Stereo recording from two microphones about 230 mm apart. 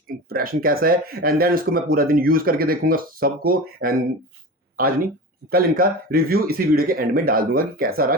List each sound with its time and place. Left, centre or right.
0.1 s speech: right